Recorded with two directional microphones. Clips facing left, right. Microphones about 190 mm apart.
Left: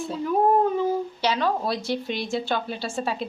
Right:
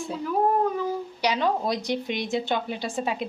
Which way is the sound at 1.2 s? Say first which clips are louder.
Right 2 dB; 15° right (ahead or behind).